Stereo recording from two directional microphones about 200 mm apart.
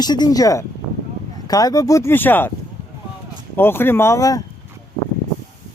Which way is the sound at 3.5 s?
10° left (ahead or behind).